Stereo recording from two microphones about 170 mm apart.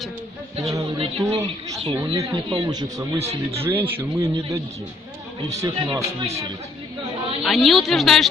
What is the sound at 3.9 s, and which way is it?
A man's voice, 20° right (ahead or behind).